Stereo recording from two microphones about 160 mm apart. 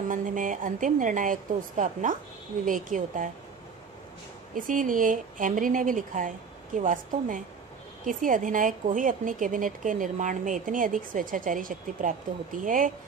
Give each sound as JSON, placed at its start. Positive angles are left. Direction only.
{"t": 0.1, "sound": "a woman's voice", "side_deg": -55}
{"t": 4.6, "sound": "a woman's voice", "side_deg": -55}